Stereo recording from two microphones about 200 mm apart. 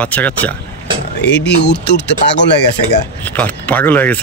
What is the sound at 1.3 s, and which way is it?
Speech, 60° left (ahead or behind).